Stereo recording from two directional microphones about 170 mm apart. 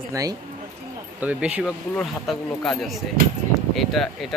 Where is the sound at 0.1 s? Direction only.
20° right (ahead or behind).